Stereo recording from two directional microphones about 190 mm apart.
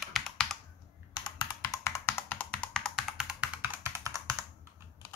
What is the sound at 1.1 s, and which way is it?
Music, 25° left (ahead or behind).